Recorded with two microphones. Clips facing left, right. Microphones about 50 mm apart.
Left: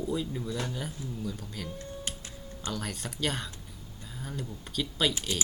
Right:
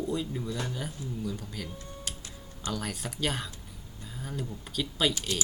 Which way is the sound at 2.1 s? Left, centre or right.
Left.